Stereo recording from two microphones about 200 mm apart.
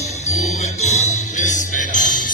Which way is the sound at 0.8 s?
35° left (ahead or behind).